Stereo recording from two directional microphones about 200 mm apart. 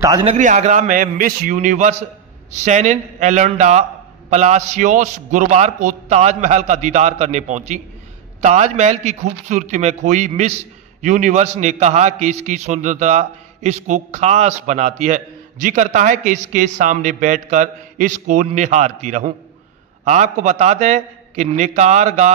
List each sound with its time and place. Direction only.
0.0 s a man's voice: 25° right (ahead or behind)